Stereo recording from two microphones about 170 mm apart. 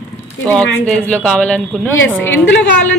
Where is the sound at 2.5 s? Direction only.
90° left.